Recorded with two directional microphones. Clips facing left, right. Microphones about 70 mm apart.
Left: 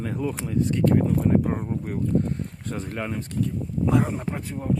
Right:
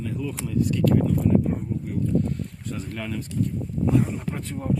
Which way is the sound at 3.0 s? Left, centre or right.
Left.